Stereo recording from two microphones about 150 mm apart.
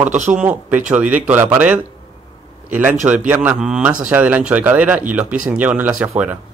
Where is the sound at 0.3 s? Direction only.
10° right (ahead or behind).